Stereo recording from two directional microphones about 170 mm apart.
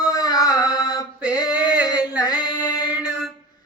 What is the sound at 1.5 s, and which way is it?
Male singing, 5° right (ahead or behind).